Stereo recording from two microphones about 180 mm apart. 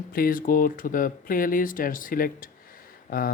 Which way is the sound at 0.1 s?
55° left (ahead or behind).